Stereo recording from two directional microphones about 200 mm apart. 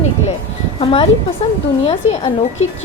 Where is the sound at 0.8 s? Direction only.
30° left (ahead or behind).